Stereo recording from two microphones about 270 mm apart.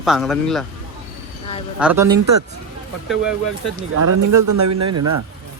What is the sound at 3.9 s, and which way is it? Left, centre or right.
Speech, right.